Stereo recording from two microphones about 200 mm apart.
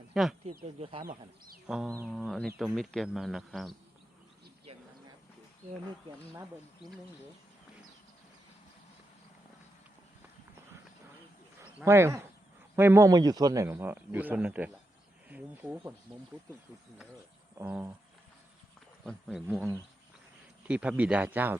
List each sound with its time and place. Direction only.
0.1 s speech: centre (ahead or behind)
0.8 s speech: 25° right (ahead or behind)
1.6 s speech: 5° right (ahead or behind)
6.1 s a man's voice: 15° right (ahead or behind)
11.8 s a man's voice: 15° right (ahead or behind)
17.6 s a man's voice: 10° right (ahead or behind)
19.0 s speech: 5° right (ahead or behind)
20.7 s a man's voice: 5° right (ahead or behind)